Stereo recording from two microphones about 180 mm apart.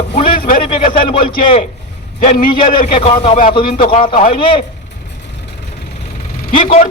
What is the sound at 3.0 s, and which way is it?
A man's voice, 30° left (ahead or behind).